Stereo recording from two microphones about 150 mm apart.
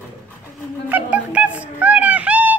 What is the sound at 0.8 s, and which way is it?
Music, 10° right (ahead or behind).